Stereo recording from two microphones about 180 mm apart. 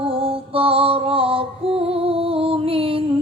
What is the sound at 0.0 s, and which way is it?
Music, 30° right (ahead or behind).